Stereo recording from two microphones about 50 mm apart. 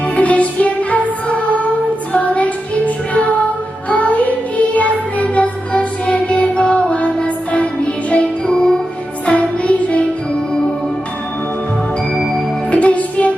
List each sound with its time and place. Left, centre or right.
0.2 s music: left
2.1 s child singing: left
3.8 s music: left
12.1 s music: centre
12.7 s music: left